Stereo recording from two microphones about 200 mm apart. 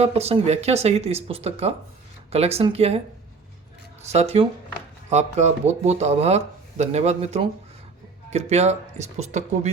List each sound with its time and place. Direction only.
0.0 s speech: 30° right (ahead or behind)
4.0 s speech: 35° right (ahead or behind)